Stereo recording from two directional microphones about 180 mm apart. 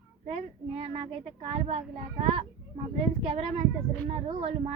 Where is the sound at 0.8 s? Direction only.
35° right (ahead or behind).